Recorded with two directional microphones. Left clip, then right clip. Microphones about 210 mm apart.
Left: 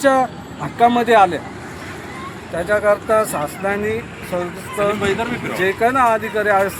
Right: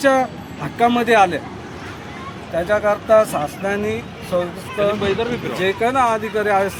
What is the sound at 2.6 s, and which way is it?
Speech, centre (ahead or behind).